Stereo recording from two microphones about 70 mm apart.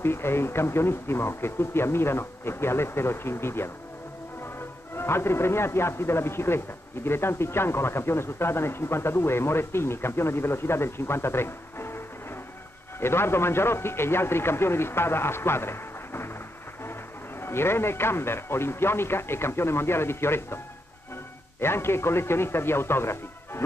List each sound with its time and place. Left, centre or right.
0.0 s speech: left
13.0 s speech: left
17.4 s speech: left